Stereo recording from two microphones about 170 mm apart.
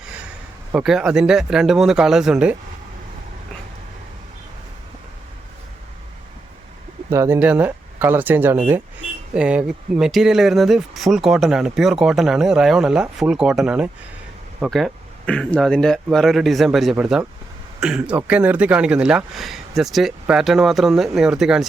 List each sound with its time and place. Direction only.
0.7 s speech: 5° right (ahead or behind)
7.1 s speech: 15° right (ahead or behind)